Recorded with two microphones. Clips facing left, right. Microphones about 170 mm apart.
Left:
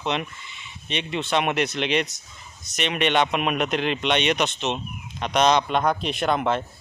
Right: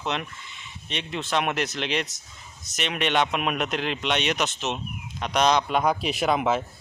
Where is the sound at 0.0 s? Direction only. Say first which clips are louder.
Left 3 dB; centre (ahead or behind).